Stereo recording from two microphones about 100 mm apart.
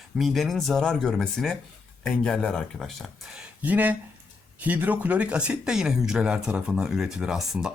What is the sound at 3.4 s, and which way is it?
Speech, 15° right (ahead or behind).